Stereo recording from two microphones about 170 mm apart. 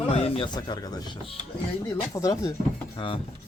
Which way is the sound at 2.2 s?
20° left (ahead or behind).